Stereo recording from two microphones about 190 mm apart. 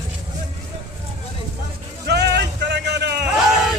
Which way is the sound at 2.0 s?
60° right (ahead or behind).